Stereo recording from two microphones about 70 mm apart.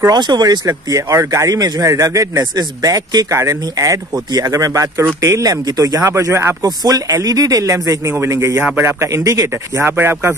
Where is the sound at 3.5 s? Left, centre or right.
Right.